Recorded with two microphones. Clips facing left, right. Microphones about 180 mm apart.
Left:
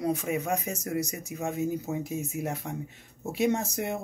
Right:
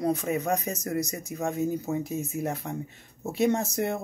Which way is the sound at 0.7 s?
35° right (ahead or behind).